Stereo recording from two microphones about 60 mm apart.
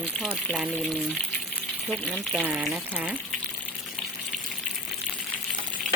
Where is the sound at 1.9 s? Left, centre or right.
Centre.